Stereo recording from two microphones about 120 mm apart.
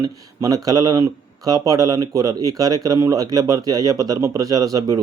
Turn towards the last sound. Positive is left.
turn(degrees=-30)  # may be behind; listen again after turning